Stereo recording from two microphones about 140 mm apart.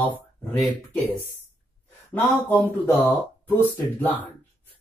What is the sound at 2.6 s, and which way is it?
Speech, 15° left (ahead or behind).